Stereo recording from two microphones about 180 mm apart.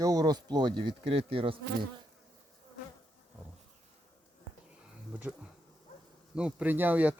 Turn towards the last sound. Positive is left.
turn(degrees=-10)  # may be behind; listen again after turning